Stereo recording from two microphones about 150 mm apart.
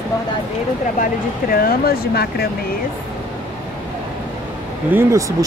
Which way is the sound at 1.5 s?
85° left.